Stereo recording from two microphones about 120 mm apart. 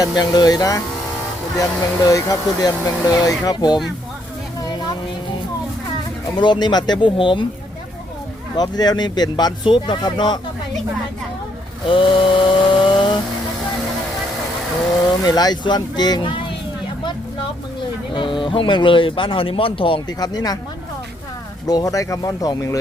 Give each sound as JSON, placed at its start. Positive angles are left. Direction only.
{"t": 0.0, "sound": "speech", "side_deg": 35}
{"t": 2.0, "sound": "speech", "side_deg": 30}
{"t": 6.4, "sound": "speech", "side_deg": 40}
{"t": 8.5, "sound": "speech", "side_deg": 35}
{"t": 11.9, "sound": "chainsaw", "side_deg": 45}
{"t": 15.2, "sound": "speech", "side_deg": 35}
{"t": 18.1, "sound": "speech", "side_deg": 45}
{"t": 20.1, "sound": "speech", "side_deg": 35}
{"t": 21.7, "sound": "speech", "side_deg": 30}